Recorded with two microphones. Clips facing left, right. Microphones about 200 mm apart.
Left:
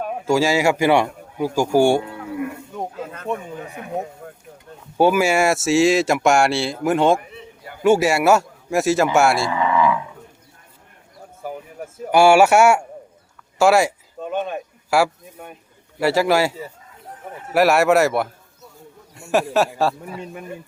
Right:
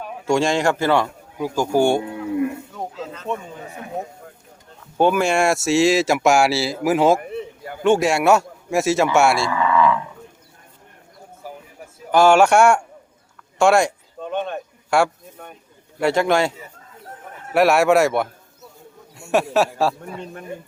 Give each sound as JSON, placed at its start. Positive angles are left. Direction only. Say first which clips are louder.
{"t": 0.3, "sound": "speech", "louder": "left 1 dB", "side_deg": 5}
{"t": 2.9, "sound": "a sound", "louder": "left 1 dB", "side_deg": 55}
{"t": 4.9, "sound": "speech", "louder": "left 1 dB", "side_deg": 5}
{"t": 7.2, "sound": "a sound", "louder": "right 10 dB", "side_deg": -55}
{"t": 7.9, "sound": "speech", "louder": "left 1 dB", "side_deg": 5}
{"t": 9.5, "sound": "roaring cats", "louder": "right 1 dB", "side_deg": 20}
{"t": 12.1, "sound": "speech", "louder": "left 1 dB", "side_deg": 10}
{"t": 13.6, "sound": "a sound", "louder": "even", "side_deg": 5}
{"t": 16.0, "sound": "speech", "louder": "left 1 dB", "side_deg": 5}